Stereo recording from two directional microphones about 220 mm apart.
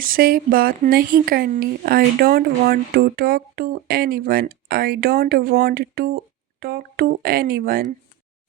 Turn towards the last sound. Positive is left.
turn(degrees=-40)  # may be behind; listen again after turning